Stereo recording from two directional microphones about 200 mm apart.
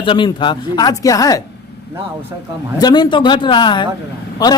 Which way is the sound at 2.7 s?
20° left (ahead or behind).